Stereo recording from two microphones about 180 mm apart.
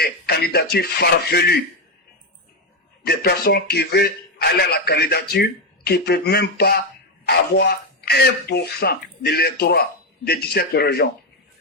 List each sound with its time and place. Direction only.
0.0 s speech: 60° left (ahead or behind)
3.0 s speech: 60° left (ahead or behind)